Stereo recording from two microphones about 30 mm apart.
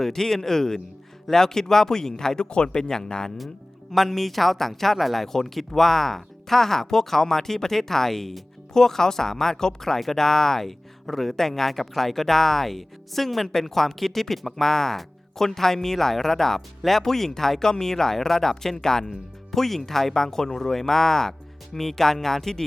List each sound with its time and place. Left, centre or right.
0.0 s speech: centre
3.9 s speech: centre